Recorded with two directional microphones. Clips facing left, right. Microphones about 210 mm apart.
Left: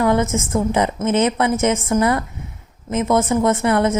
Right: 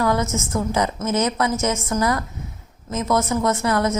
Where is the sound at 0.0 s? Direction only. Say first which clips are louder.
Left 4 dB; 25° left (ahead or behind).